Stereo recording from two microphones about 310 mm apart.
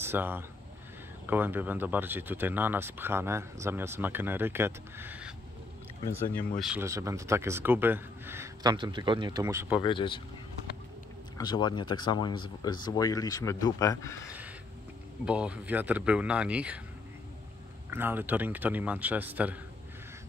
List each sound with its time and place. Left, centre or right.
0.0 s speech: centre
6.6 s speech: centre
9.8 s speech: centre
11.3 s speech: centre
15.2 s a man's voice: centre
17.8 s a man's voice: centre